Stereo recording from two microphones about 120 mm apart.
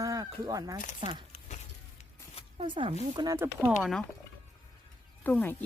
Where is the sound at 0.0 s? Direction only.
30° right (ahead or behind).